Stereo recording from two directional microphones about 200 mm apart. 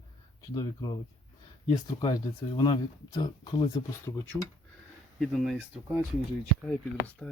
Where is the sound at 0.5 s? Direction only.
20° left (ahead or behind).